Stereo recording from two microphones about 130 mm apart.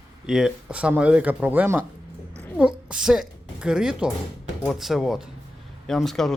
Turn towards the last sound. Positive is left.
turn(degrees=0)  # may be behind; listen again after turning